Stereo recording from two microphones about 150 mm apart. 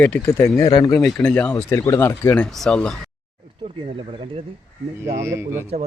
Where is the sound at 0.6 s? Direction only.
25° left (ahead or behind).